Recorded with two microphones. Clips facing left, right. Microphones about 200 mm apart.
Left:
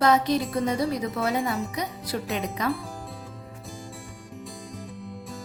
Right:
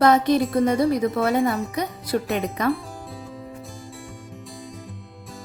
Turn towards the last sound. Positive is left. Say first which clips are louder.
# left 3 dB
turn(degrees=0)  # may be behind; listen again after turning